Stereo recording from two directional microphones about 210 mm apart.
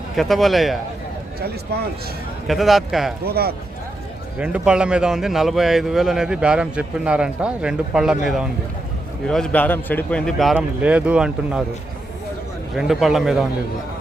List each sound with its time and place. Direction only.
0.2 s a man's voice: centre (ahead or behind)
2.5 s a man's voice: centre (ahead or behind)
3.2 s speech: 50° right (ahead or behind)
4.4 s a man's voice: 5° right (ahead or behind)
12.7 s a man's voice: centre (ahead or behind)